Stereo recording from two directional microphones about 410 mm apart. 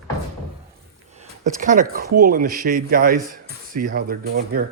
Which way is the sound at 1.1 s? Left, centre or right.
Centre.